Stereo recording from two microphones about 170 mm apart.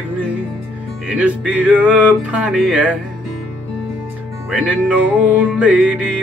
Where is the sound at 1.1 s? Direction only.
10° right (ahead or behind).